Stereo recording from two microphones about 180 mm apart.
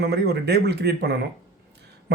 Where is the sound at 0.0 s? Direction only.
65° right (ahead or behind).